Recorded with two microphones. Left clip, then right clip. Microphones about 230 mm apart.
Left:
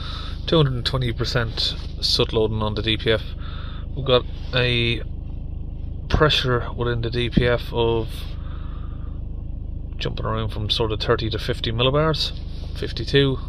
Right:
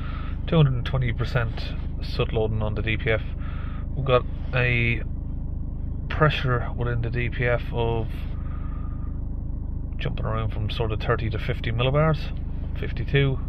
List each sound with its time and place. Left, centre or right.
0.5 s speech: left
6.0 s speech: left
9.9 s speech: left